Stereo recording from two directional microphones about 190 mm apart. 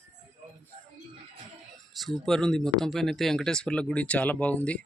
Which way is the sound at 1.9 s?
Centre (ahead or behind).